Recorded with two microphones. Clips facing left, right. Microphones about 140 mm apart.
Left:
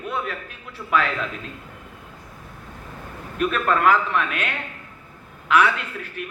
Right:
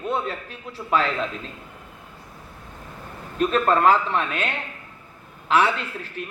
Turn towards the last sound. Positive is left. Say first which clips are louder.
# even
turn(degrees=-30)  # may be behind; listen again after turning